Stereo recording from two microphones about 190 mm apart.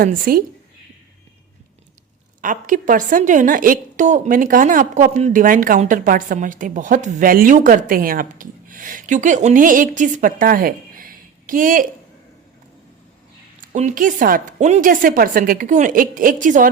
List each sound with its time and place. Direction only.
0.0 s a woman's voice: 50° right (ahead or behind)
2.4 s a woman's voice: 45° right (ahead or behind)
13.7 s a woman's voice: 45° right (ahead or behind)